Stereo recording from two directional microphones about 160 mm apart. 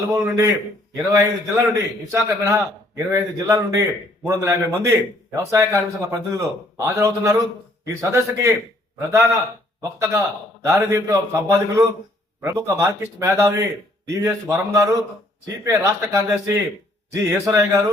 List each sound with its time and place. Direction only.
0.1 s a man's voice: 20° right (ahead or behind)